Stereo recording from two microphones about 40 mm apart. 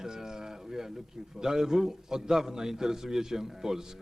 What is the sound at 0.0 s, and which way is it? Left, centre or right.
A man's voice, centre.